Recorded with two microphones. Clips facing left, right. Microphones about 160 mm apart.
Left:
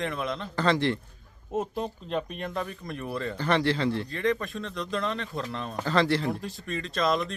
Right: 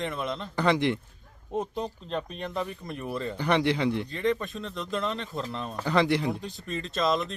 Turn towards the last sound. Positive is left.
turn(degrees=0)  # may be behind; listen again after turning